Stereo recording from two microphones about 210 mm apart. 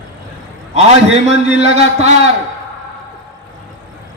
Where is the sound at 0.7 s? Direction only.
30° right (ahead or behind).